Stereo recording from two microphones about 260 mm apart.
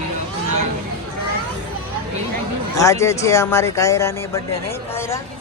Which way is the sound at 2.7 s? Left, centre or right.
Centre.